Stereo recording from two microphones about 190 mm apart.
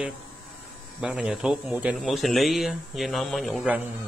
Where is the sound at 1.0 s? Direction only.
5° right (ahead or behind).